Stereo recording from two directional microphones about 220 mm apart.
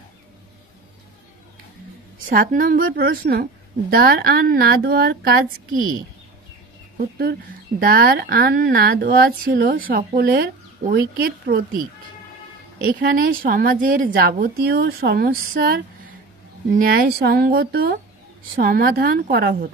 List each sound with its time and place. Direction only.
2.2 s a woman's voice: 40° right (ahead or behind)
7.0 s speech: 45° right (ahead or behind)
12.8 s a woman's voice: 40° right (ahead or behind)